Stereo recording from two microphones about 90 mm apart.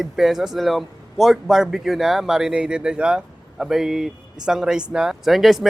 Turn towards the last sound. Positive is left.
turn(degrees=0)  # may be behind; listen again after turning